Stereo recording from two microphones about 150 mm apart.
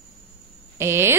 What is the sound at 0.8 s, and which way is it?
Speech, 15° right (ahead or behind).